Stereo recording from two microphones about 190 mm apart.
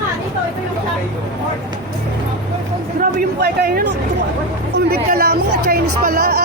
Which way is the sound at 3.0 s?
55° right (ahead or behind).